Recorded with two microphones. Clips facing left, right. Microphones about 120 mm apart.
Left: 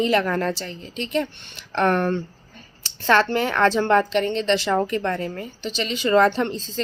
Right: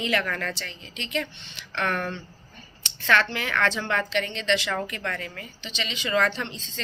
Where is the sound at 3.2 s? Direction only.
40° left (ahead or behind).